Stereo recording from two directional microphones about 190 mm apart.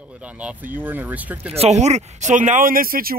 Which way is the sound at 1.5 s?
35° right (ahead or behind).